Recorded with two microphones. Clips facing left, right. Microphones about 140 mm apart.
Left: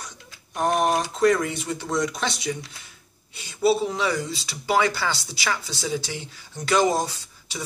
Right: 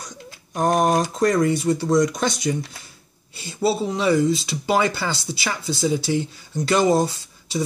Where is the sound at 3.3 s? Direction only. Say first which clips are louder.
Left 1 dB; 30° right (ahead or behind).